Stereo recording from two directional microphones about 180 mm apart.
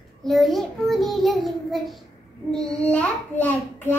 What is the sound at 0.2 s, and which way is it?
A child's voice, centre (ahead or behind).